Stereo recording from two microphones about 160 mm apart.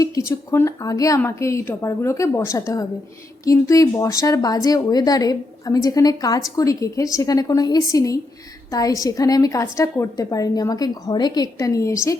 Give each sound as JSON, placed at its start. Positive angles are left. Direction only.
{"t": 0.3, "sound": "speech", "side_deg": 15}